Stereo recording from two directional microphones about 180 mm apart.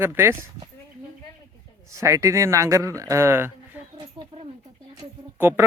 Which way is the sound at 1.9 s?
15° right (ahead or behind).